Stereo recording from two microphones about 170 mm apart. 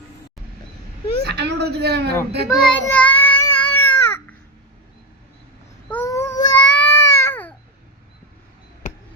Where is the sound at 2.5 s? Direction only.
5° left (ahead or behind).